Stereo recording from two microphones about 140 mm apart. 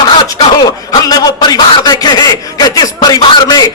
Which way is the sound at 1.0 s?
25° left (ahead or behind).